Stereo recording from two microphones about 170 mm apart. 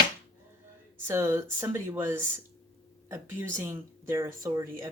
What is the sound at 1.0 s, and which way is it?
Speech, 15° right (ahead or behind).